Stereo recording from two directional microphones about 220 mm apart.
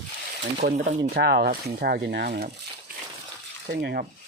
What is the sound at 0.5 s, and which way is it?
Speech, 40° right (ahead or behind).